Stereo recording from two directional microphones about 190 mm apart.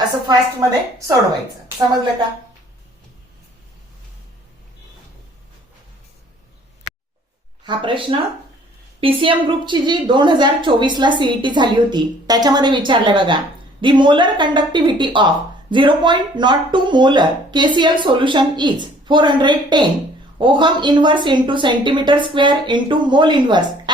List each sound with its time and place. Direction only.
0.3 s a woman's voice: 20° right (ahead or behind)
7.6 s a woman's voice: 25° right (ahead or behind)